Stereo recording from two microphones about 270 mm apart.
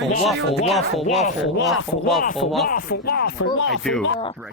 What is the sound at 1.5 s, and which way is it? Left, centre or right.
Speech, left.